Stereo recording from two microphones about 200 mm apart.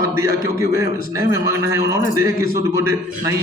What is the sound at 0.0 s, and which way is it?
A man's voice, 15° right (ahead or behind).